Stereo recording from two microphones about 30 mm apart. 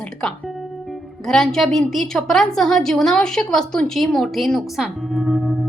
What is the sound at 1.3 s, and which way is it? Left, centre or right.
A woman's voice, centre.